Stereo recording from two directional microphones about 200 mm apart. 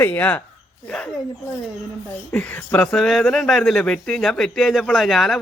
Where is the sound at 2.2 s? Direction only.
5° left (ahead or behind).